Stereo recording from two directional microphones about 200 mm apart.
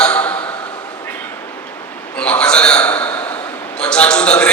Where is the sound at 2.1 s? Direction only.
5° left (ahead or behind).